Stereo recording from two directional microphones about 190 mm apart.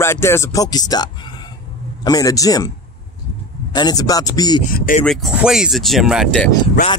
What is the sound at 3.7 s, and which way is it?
Speech, 20° left (ahead or behind).